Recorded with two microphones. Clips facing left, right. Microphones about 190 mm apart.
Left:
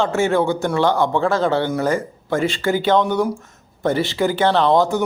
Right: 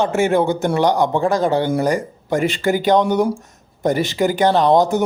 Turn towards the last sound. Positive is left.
turn(degrees=-20)  # may be behind; listen again after turning